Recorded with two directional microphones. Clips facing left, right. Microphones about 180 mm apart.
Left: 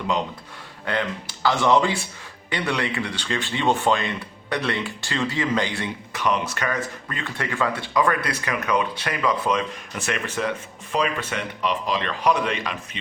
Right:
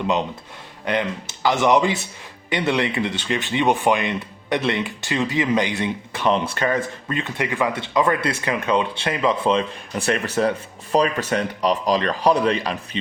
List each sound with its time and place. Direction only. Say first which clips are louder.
0.9 s speech: right 3 dB; 20° right (ahead or behind); by 13.0 s 35° right (ahead or behind)